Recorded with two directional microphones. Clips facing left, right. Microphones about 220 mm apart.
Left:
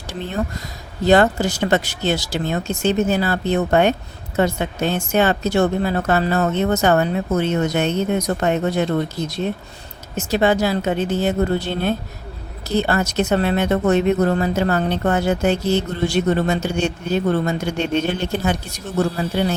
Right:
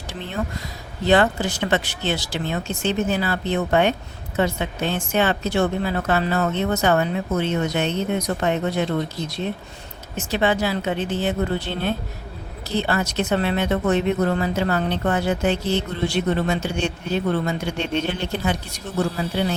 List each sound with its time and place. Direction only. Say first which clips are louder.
1.0 s speech: left 3 dB; 40° left (ahead or behind)